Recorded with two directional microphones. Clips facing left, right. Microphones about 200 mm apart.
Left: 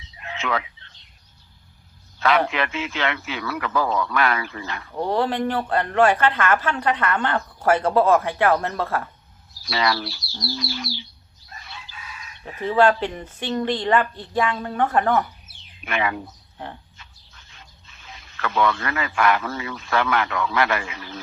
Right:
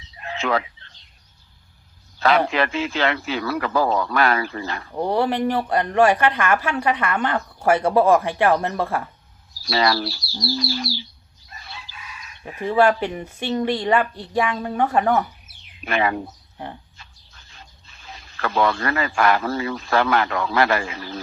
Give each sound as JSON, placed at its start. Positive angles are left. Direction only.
{"t": 0.2, "sound": "telephone", "side_deg": -35}
{"t": 2.1, "sound": "a man's voice", "side_deg": -35}
{"t": 4.9, "sound": "speech", "side_deg": -15}
{"t": 9.6, "sound": "a man's voice", "side_deg": -35}
{"t": 12.5, "sound": "speech", "side_deg": -10}
{"t": 15.8, "sound": "a man's voice", "side_deg": -35}